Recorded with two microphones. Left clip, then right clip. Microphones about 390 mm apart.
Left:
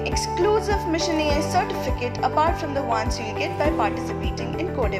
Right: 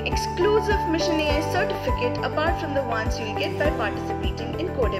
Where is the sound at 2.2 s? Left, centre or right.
Left.